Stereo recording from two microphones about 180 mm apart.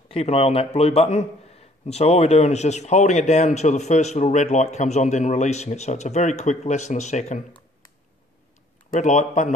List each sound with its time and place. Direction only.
0.1 s a man's voice: 35° left (ahead or behind)
8.9 s a man's voice: 45° left (ahead or behind)